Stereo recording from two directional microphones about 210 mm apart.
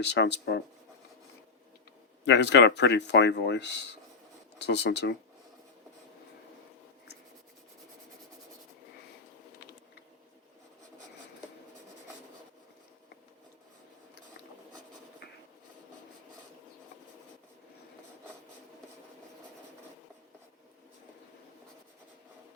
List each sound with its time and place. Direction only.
0.0 s speech: 55° left (ahead or behind)
2.2 s speech: 55° left (ahead or behind)